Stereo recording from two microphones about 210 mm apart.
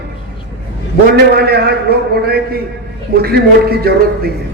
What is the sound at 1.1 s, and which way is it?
A man's voice, 50° right (ahead or behind).